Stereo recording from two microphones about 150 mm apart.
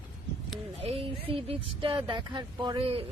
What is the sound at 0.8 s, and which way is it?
Speech, 40° right (ahead or behind).